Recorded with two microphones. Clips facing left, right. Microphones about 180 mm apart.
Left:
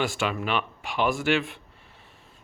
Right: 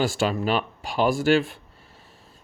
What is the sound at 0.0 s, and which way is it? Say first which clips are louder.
Speech: right 4 dB; 35° right (ahead or behind).